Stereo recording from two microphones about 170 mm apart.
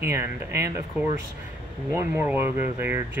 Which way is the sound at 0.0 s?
15° right (ahead or behind).